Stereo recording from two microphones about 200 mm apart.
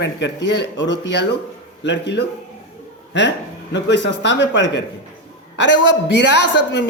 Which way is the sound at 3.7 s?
60° left (ahead or behind).